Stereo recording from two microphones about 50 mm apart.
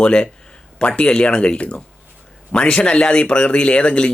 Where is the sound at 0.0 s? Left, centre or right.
Centre.